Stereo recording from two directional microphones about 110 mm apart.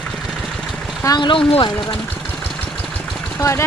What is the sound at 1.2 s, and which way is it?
Speech, 50° left (ahead or behind).